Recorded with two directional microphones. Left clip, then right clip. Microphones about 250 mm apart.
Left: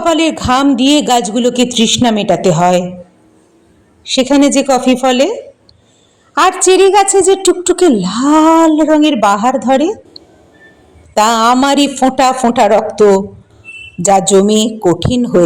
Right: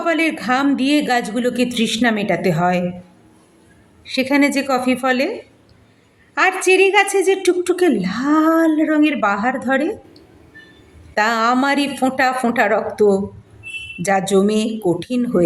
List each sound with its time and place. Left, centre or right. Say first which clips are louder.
0.0 s a man's voice: left 6 dB; left
4.0 s a man's voice: left 7 dB; left
6.3 s a man's voice: left 6 dB; left
11.1 s a man's voice: left 7 dB; left